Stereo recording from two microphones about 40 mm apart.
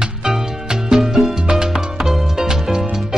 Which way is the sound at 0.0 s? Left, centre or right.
Centre.